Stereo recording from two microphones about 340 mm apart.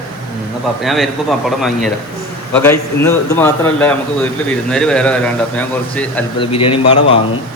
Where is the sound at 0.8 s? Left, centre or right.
Centre.